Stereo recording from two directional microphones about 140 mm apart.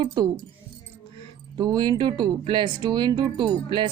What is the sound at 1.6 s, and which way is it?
Speech, 30° right (ahead or behind).